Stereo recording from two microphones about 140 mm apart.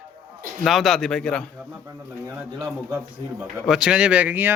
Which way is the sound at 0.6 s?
Centre (ahead or behind).